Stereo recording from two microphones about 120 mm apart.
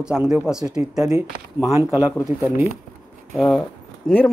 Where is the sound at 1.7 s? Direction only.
25° right (ahead or behind).